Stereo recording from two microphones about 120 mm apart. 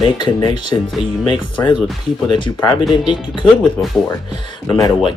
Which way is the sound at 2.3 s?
40° left (ahead or behind).